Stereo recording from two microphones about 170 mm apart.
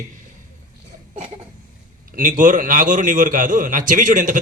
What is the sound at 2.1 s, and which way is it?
A man's voice, 50° right (ahead or behind).